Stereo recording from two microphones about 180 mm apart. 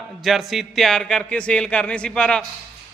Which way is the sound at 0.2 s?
Centre (ahead or behind).